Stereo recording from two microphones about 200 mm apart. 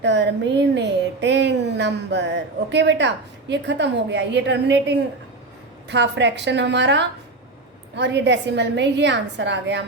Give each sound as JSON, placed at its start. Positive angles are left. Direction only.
{"t": 0.0, "sound": "a woman's voice", "side_deg": -60}